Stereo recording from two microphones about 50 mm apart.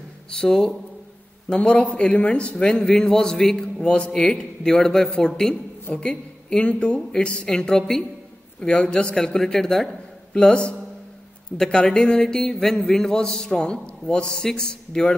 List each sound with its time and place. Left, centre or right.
0.3 s speech: centre
1.5 s speech: left